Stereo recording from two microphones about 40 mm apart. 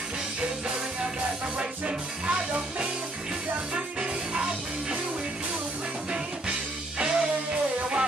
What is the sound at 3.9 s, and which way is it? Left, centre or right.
Music, centre.